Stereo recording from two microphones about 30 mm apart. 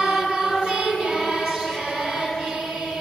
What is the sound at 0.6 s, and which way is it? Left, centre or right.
Child singing, right.